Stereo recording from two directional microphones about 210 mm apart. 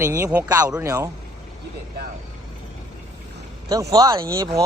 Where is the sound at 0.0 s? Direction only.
15° right (ahead or behind).